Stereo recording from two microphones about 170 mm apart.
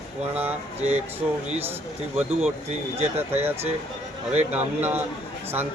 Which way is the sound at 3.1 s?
15° right (ahead or behind).